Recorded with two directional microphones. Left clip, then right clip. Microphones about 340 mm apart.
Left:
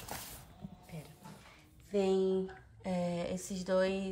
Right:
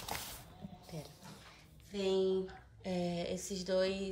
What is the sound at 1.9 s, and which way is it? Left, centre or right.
A woman's voice, centre.